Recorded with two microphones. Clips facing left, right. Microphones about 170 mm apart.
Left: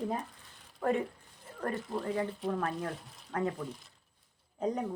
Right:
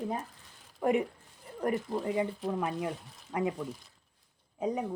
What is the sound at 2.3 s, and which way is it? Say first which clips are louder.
Speech: right 1 dB; centre (ahead or behind).